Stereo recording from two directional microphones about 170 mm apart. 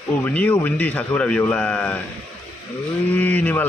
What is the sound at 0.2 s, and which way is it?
Speech, 10° left (ahead or behind).